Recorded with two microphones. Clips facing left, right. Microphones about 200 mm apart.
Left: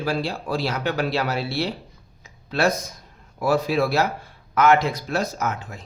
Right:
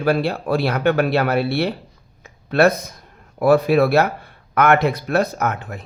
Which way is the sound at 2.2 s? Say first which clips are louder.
Right 7 dB; 60° right (ahead or behind).